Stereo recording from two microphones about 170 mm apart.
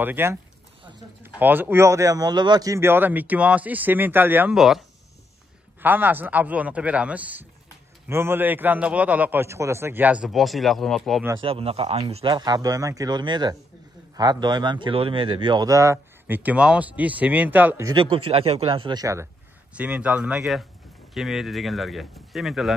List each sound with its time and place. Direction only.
0.0 s speech: 15° right (ahead or behind)
11.3 s speech: 35° right (ahead or behind); by 18.0 s 20° right (ahead or behind)
18.1 s speech: 35° right (ahead or behind)
19.7 s speech: 5° right (ahead or behind)